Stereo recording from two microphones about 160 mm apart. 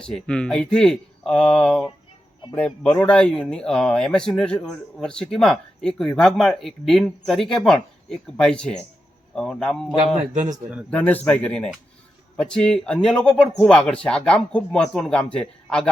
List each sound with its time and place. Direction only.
0.0 s speech: 5° left (ahead or behind)
10.3 s speech: 50° right (ahead or behind)
10.9 s speech: 10° left (ahead or behind)